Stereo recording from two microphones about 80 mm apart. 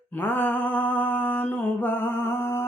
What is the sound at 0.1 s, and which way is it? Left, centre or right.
Mantra, left.